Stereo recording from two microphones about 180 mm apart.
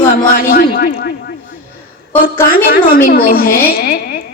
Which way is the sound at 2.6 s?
50° left (ahead or behind).